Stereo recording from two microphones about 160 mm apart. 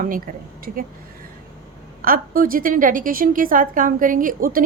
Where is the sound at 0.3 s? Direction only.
65° right (ahead or behind).